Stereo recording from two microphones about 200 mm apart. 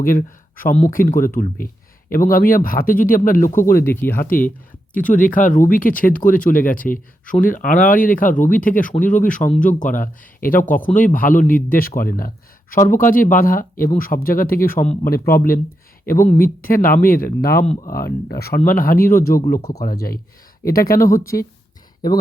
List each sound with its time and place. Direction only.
0.5 s speech: 40° left (ahead or behind)
3.8 s speech: 10° left (ahead or behind)
4.3 s a man's voice: 45° left (ahead or behind)